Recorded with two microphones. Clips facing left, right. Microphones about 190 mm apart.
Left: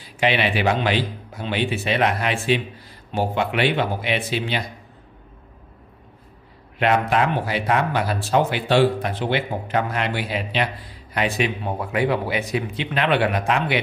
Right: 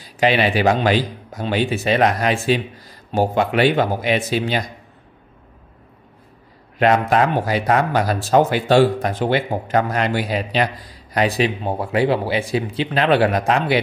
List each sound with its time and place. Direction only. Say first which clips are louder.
0.0 s speech: right 4 dB; 40° right (ahead or behind)
6.8 s speech: right 4 dB; 40° right (ahead or behind)